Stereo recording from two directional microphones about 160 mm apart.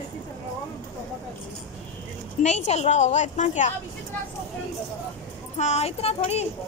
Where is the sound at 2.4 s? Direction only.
45° left (ahead or behind).